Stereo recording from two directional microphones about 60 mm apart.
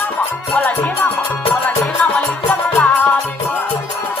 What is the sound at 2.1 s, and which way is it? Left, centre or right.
Music, left.